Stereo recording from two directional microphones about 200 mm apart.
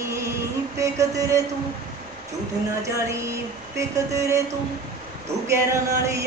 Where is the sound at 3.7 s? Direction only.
15° right (ahead or behind).